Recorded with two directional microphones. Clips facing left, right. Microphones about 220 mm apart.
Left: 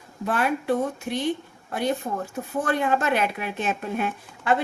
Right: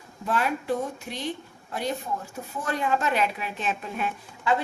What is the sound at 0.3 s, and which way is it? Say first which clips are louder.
Speech: left 3 dB; 60° left (ahead or behind).